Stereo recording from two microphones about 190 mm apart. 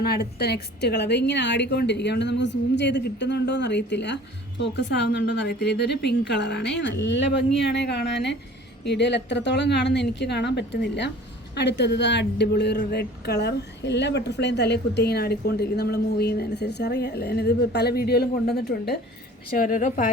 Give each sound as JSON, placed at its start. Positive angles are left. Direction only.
{"t": 0.0, "sound": "a woman's voice", "side_deg": 55}
{"t": 19.5, "sound": "speech", "side_deg": 45}